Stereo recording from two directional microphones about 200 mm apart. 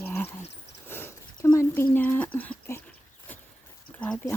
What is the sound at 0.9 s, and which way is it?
Sniff, 10° left (ahead or behind).